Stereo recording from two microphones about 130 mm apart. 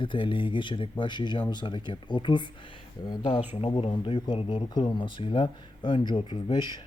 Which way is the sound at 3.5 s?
50° left (ahead or behind).